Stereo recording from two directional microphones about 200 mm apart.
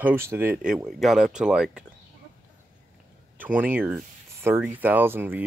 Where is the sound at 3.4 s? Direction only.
10° right (ahead or behind).